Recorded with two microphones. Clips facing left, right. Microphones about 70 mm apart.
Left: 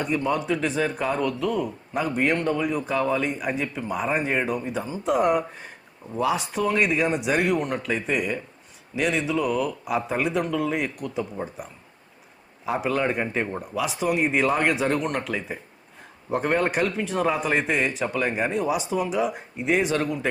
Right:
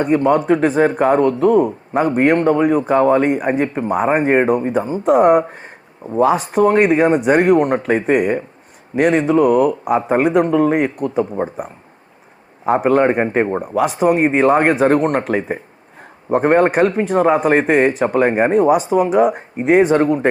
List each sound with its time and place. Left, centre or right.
0.0 s speech: right